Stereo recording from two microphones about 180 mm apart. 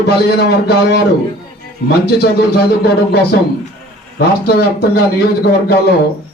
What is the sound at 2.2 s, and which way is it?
A man's voice, 60° left (ahead or behind).